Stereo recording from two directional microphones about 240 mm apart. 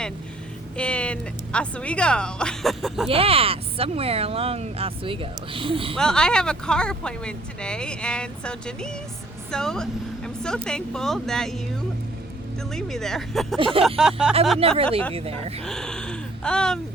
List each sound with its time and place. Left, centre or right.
0.8 s speech: centre
3.1 s speech: right
6.0 s speech: centre
12.7 s speech: centre
13.6 s speech: right
13.8 s speech: centre
14.6 s speech: right
15.6 s speech: centre